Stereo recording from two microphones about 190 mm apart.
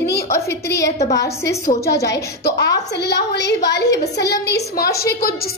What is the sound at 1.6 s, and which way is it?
Speech, 55° left (ahead or behind).